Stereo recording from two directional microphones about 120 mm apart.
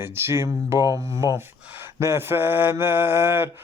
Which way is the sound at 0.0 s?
20° right (ahead or behind).